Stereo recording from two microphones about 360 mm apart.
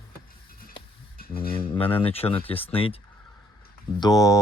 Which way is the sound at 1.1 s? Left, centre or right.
Left.